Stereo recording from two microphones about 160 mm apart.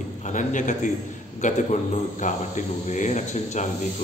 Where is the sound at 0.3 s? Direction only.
50° left (ahead or behind).